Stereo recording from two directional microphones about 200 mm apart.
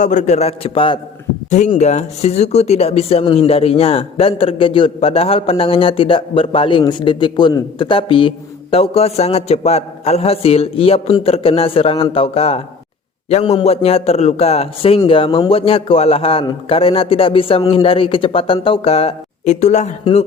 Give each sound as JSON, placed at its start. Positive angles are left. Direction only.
{"t": 0.0, "sound": "a man's voice", "side_deg": 35}